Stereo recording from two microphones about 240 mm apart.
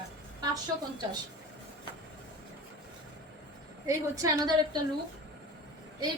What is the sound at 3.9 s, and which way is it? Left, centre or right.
Speech, centre.